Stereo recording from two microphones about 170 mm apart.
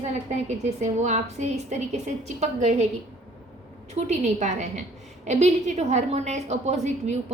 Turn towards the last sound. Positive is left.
turn(degrees=-40)  # may be behind; listen again after turning